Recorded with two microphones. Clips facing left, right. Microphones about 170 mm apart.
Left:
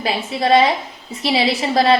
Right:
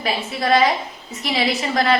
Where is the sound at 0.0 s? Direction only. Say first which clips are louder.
Left 3 dB; 25° left (ahead or behind).